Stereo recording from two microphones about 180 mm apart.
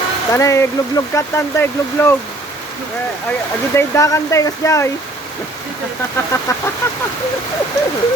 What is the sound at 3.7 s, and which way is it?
Speech, 15° left (ahead or behind).